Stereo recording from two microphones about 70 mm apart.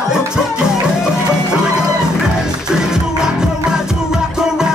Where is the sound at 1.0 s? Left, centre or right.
Centre.